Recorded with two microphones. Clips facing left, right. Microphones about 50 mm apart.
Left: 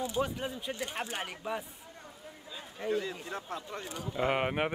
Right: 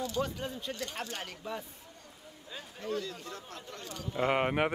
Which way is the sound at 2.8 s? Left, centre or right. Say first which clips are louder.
Left 4 dB; left.